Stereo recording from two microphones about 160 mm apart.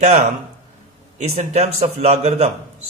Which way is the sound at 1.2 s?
45° right (ahead or behind).